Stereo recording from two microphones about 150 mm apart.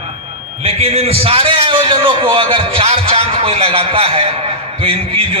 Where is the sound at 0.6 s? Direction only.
45° right (ahead or behind).